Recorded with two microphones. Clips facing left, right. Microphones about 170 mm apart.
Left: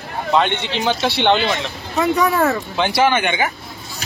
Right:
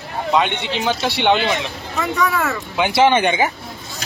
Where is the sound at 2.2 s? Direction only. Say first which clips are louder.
Left 4 dB; 40° left (ahead or behind).